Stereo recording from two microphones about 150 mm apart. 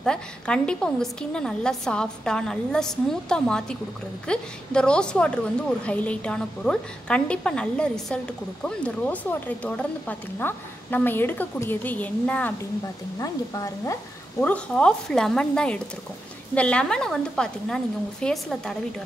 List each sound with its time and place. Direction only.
0.0 s a woman's voice: 5° left (ahead or behind)
13.2 s speech: 20° left (ahead or behind)
14.4 s a woman's voice: 5° left (ahead or behind)